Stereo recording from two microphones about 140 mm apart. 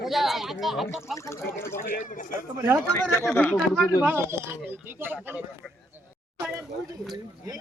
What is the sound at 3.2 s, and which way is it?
Speech, 15° left (ahead or behind).